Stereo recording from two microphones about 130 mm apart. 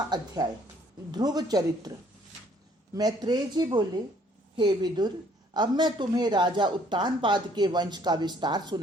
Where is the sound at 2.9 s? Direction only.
30° right (ahead or behind).